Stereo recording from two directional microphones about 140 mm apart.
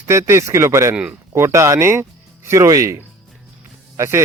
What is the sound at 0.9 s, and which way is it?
Speech, 10° right (ahead or behind).